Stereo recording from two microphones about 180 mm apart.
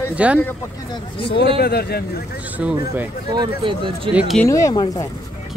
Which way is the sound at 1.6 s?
60° left (ahead or behind).